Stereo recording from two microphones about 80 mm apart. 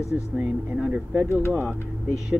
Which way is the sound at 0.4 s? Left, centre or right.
Centre.